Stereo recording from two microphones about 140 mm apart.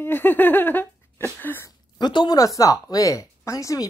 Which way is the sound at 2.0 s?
35° left (ahead or behind).